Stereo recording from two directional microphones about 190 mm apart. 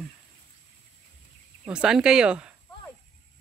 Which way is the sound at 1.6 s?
5° right (ahead or behind).